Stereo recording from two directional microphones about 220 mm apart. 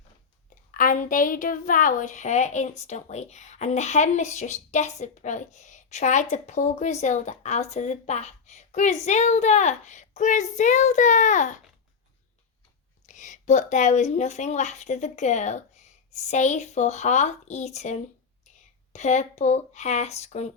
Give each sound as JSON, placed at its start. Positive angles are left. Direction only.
{"t": 0.7, "sound": "a woman's voice", "side_deg": 40}
{"t": 13.1, "sound": "a woman's voice", "side_deg": 35}